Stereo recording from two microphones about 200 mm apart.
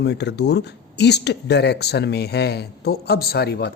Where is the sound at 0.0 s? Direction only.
60° left (ahead or behind).